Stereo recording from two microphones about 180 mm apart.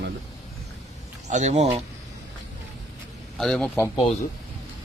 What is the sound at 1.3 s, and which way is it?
Speech, 40° right (ahead or behind).